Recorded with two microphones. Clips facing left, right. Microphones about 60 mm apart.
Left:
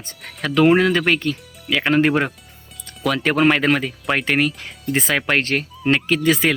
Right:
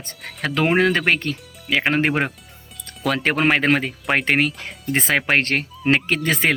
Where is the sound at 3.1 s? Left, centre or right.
Right.